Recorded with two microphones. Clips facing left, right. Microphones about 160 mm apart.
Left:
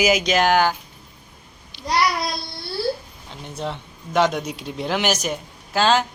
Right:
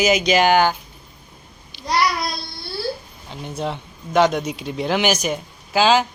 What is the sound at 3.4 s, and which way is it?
Speech, centre (ahead or behind).